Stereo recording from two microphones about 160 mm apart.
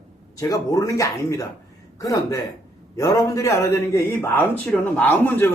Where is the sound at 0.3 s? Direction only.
20° left (ahead or behind).